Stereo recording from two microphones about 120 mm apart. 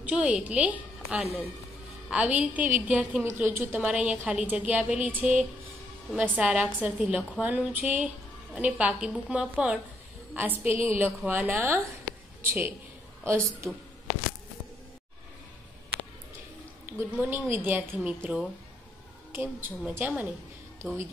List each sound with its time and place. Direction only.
0.0 s a woman's voice: 10° right (ahead or behind)
16.8 s a woman's voice: 20° right (ahead or behind)